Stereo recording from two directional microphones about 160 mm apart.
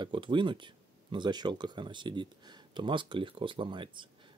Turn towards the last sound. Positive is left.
turn(degrees=-30)  # may be behind; listen again after turning